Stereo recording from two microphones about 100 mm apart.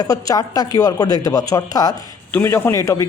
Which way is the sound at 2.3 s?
25° left (ahead or behind).